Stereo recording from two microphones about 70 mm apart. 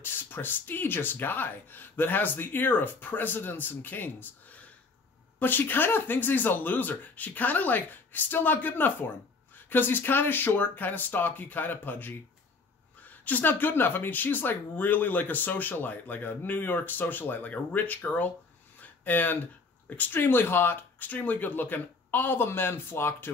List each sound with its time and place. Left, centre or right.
0.0 s speech: left
18.8 s a sound: left
19.9 s speech: left